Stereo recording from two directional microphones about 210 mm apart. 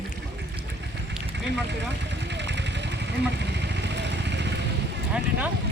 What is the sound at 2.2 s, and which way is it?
Vehicle, 55° right (ahead or behind).